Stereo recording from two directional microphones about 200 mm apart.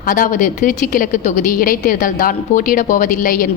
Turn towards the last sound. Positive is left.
turn(degrees=45)  # may be behind; listen again after turning